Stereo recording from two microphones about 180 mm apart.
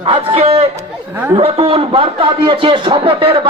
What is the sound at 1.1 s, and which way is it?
Speech, 15° right (ahead or behind).